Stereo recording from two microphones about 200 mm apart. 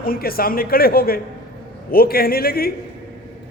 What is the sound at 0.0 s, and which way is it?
A man's voice, 45° left (ahead or behind).